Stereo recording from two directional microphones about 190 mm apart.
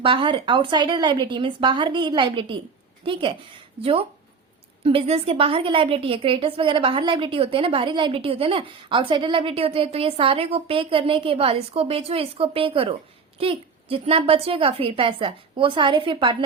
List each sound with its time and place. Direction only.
0.0 s a woman's voice: 25° right (ahead or behind)